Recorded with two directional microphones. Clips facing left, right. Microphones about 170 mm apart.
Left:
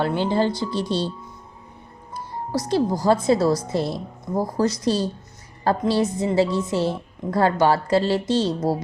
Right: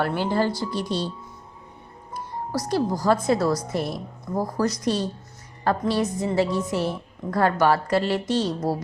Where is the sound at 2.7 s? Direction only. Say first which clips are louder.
Left 2 dB; 25° left (ahead or behind).